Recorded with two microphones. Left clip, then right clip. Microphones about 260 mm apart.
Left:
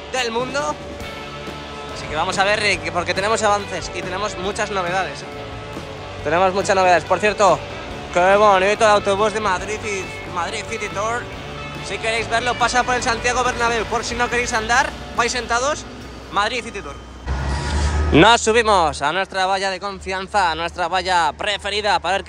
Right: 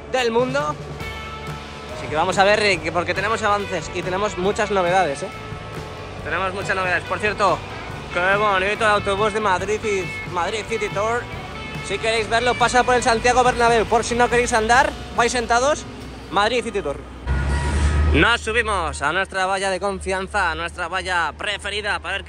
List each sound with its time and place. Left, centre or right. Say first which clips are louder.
0.1 s speech: right 2 dB; centre
2.1 s speech: right 2 dB; centre
6.3 s speech: left 6 dB; centre
18.1 s speech: left 5 dB; centre